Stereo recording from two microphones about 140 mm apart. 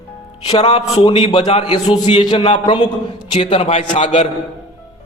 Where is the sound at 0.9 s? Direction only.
40° left (ahead or behind).